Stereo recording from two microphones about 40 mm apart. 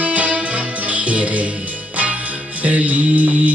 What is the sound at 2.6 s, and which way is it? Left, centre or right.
Music, right.